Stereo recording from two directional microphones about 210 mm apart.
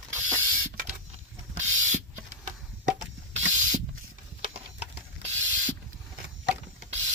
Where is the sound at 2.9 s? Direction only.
35° right (ahead or behind).